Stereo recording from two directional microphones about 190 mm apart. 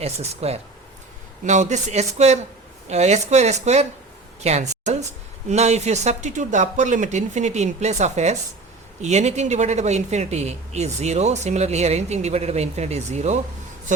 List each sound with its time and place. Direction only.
0.0 s speech: 35° right (ahead or behind)